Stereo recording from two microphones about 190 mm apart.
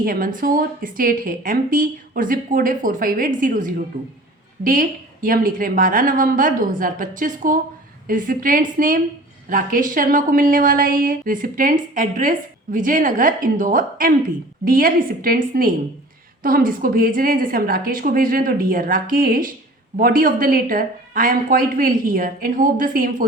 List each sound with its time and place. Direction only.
0.0 s a woman's voice: 50° right (ahead or behind)
3.9 s speech: 25° right (ahead or behind)
4.6 s a woman's voice: 45° right (ahead or behind)